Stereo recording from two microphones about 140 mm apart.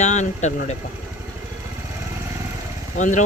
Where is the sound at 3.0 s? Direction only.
60° left (ahead or behind).